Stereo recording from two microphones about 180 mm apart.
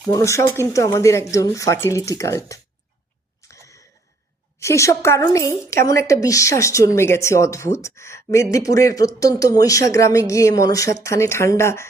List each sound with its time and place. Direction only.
0.1 s speech: 15° left (ahead or behind)
3.5 s a sound: 15° left (ahead or behind)
4.6 s speech: 15° left (ahead or behind)